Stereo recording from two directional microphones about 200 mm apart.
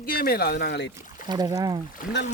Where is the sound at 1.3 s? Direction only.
20° right (ahead or behind).